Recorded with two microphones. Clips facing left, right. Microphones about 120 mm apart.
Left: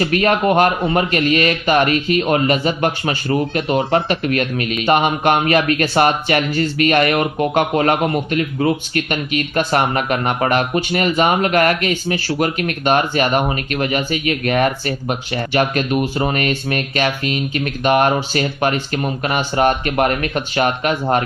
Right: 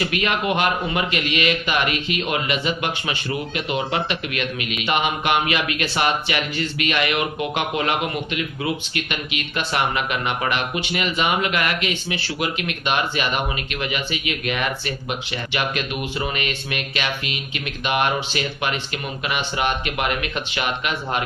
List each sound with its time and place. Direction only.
0.0 s speech: 40° left (ahead or behind)